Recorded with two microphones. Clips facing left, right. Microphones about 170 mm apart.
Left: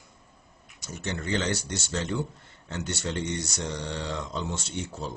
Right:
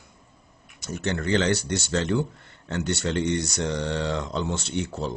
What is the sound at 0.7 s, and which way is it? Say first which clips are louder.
Speech: right 6 dB; 70° right (ahead or behind).